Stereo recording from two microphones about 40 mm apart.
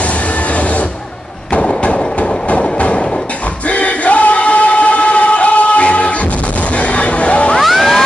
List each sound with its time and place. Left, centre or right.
1.5 s train: left
3.6 s choir: left
6.8 s a sound: left
7.6 s music: centre